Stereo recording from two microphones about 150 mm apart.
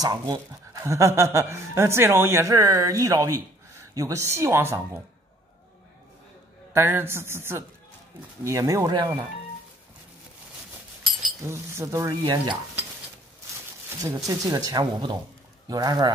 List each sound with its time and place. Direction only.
0.0 s speech: 25° right (ahead or behind)
6.7 s a woman's voice: 15° right (ahead or behind)
11.4 s speech: 20° right (ahead or behind)
14.0 s speech: 20° right (ahead or behind)